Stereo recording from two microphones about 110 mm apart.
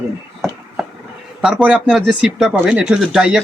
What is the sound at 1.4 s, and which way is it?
Speech, 5° right (ahead or behind).